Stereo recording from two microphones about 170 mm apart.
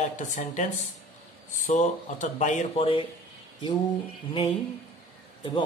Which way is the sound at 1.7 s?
45° left (ahead or behind).